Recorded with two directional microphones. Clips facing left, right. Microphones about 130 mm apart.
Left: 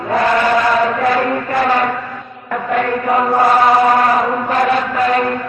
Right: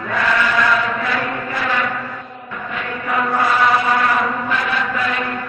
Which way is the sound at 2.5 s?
60° left (ahead or behind).